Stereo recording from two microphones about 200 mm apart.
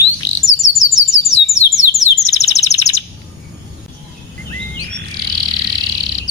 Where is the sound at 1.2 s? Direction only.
15° left (ahead or behind).